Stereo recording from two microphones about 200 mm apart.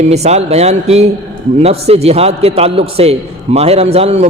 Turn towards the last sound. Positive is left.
turn(degrees=-30)  # may be behind; listen again after turning